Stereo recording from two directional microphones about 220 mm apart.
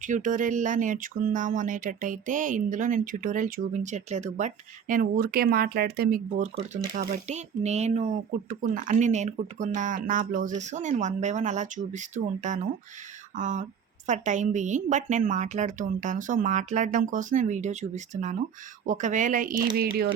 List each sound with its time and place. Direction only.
0.0 s speech: 35° right (ahead or behind)